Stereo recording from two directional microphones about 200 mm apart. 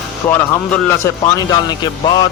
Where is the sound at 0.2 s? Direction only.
15° left (ahead or behind).